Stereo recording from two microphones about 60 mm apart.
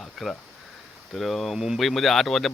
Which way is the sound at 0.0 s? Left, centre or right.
Centre.